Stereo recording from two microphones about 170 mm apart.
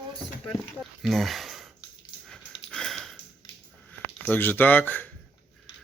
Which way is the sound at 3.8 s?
10° left (ahead or behind).